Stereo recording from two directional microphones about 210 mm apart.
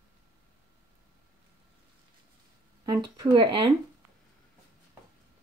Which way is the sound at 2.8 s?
20° right (ahead or behind).